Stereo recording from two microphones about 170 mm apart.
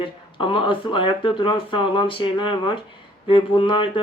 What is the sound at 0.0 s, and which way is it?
Speech, 30° left (ahead or behind).